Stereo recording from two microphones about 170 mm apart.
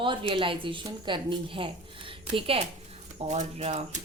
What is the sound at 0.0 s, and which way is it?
A woman's voice, 30° right (ahead or behind).